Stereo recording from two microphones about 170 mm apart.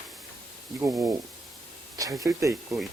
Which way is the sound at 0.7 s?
20° right (ahead or behind).